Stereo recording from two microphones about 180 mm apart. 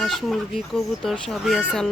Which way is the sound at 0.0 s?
Centre (ahead or behind).